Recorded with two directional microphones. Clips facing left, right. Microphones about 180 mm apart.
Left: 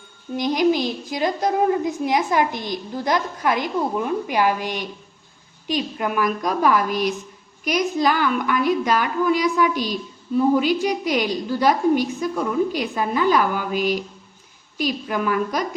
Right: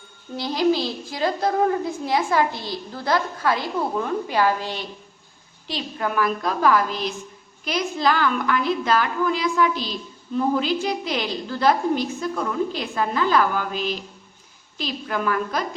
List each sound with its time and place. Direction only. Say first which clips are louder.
0.3 s a woman's voice: left 2 dB; 15° left (ahead or behind)